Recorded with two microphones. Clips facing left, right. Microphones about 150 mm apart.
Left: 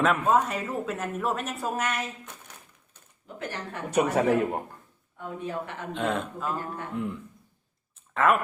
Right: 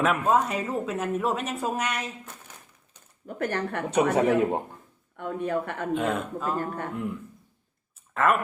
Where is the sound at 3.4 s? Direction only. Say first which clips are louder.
Right 7 dB; 60° right (ahead or behind).